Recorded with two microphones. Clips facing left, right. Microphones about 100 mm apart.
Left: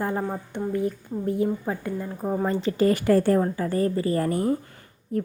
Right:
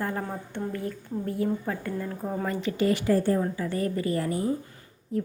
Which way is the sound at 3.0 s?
75° left (ahead or behind).